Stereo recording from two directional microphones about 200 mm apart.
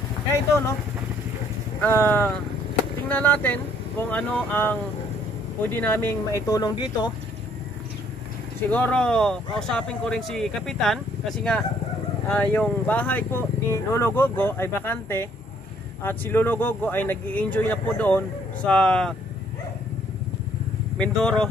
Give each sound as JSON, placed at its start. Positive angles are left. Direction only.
{"t": 1.8, "sound": "speech", "side_deg": 5}
{"t": 8.6, "sound": "speech", "side_deg": 10}
{"t": 21.0, "sound": "speech", "side_deg": 5}